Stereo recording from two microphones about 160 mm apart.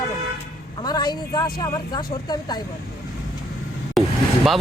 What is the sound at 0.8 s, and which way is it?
A woman's voice, 25° left (ahead or behind).